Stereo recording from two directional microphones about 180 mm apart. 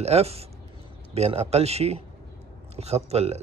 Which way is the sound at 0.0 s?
35° right (ahead or behind).